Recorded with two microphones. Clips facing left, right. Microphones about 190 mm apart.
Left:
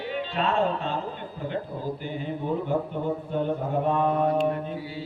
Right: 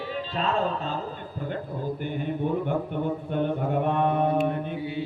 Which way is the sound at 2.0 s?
55° right (ahead or behind).